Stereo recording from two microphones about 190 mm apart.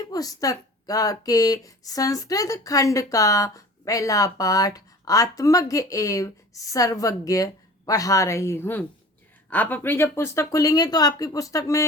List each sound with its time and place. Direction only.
0.0 s speech: 20° left (ahead or behind)